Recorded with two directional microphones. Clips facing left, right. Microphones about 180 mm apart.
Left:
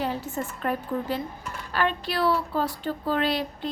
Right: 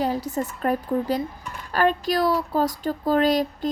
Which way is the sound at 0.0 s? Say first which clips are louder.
Right 4 dB; 40° right (ahead or behind).